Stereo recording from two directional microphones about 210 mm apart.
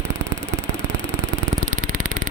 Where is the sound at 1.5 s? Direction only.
40° right (ahead or behind).